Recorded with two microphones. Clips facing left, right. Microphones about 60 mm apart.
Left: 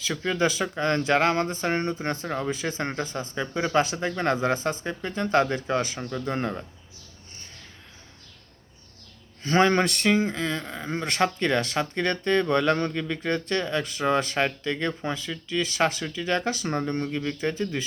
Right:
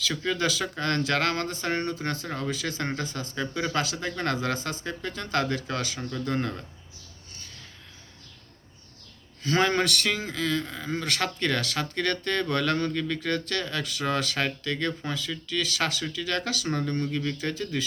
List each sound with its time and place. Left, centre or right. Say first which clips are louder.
0.1 s speech: left 3 dB; centre
0.3 s speech: left 3 dB; left
9.4 s speech: left 3 dB; left